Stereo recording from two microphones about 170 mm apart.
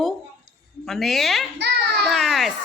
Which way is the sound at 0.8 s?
Centre (ahead or behind).